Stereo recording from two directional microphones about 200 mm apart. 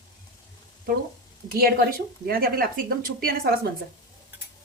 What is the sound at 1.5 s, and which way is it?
A woman's voice, 50° right (ahead or behind).